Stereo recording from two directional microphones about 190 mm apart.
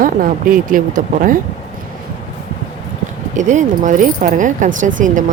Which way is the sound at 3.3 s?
40° right (ahead or behind).